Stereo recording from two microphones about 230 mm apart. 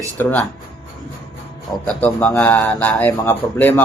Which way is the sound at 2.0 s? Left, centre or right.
Centre.